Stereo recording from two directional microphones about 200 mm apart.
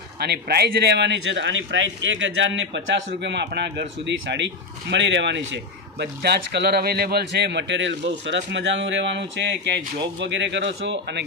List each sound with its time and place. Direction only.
0.2 s speech: 55° right (ahead or behind)